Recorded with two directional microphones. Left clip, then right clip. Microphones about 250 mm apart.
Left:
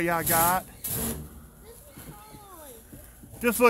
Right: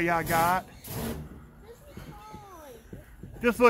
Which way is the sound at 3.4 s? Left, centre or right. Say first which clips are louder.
Even; centre.